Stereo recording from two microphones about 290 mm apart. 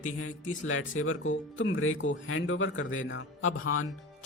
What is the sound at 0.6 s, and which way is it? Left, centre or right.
Speech, left.